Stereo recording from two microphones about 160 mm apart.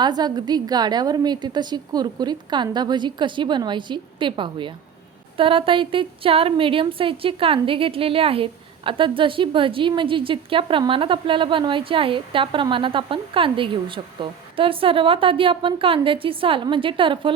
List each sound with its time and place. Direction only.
0.0 s a woman's voice: 25° right (ahead or behind)